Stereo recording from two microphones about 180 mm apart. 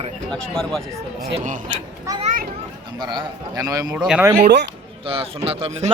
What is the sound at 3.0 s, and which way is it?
Speech, 25° right (ahead or behind).